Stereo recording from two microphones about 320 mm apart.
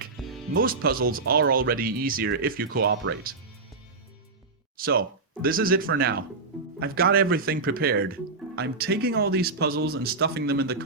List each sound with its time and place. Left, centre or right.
0.2 s music: centre
0.5 s speech: right
4.8 s speech: right